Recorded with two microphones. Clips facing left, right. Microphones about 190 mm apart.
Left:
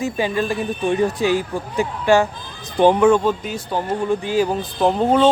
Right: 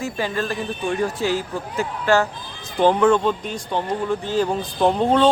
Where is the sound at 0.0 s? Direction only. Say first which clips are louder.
Left 4 dB; 15° left (ahead or behind).